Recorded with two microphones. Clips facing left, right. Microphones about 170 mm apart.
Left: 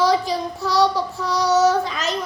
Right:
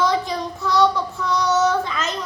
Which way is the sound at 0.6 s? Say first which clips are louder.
Right 1 dB; 35° left (ahead or behind).